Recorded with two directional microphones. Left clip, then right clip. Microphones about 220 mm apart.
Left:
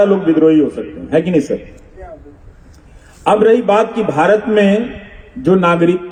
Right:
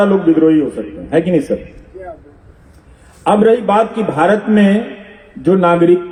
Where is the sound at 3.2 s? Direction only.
35° left (ahead or behind).